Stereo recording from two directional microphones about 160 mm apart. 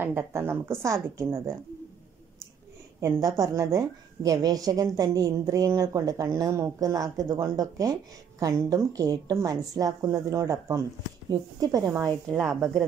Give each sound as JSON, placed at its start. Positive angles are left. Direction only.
{"t": 0.0, "sound": "a woman's voice", "side_deg": -15}
{"t": 3.0, "sound": "a woman's voice", "side_deg": -20}